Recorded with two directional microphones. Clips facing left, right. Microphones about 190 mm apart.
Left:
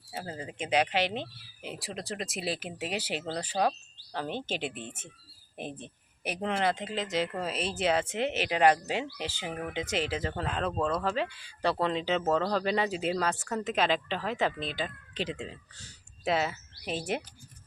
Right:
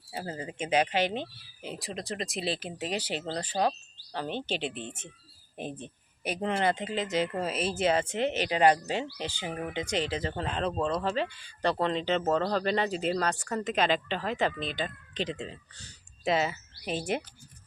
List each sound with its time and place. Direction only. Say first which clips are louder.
0.1 s speech: right 2 dB; centre (ahead or behind)
6.4 s speech: right 1 dB; centre (ahead or behind)